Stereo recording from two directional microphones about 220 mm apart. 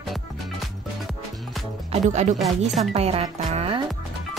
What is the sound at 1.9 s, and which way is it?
Speech, 30° right (ahead or behind).